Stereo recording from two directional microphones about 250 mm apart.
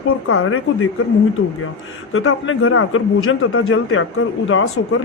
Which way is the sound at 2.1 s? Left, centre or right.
Left.